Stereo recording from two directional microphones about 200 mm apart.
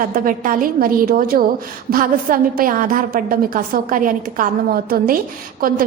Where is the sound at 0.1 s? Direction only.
45° right (ahead or behind).